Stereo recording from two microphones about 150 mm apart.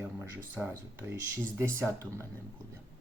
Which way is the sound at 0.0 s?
10° right (ahead or behind).